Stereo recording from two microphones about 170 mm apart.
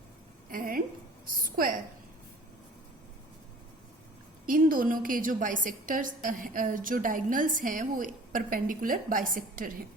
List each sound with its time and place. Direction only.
0.5 s a sound: 55° right (ahead or behind)
1.3 s a woman's voice: 55° right (ahead or behind)
4.4 s a woman's voice: 55° right (ahead or behind)